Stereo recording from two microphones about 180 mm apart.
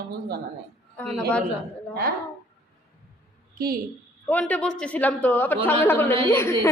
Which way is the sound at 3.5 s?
55° right (ahead or behind).